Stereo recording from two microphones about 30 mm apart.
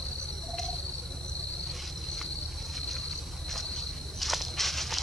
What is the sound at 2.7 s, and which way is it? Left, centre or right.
Cricket, centre.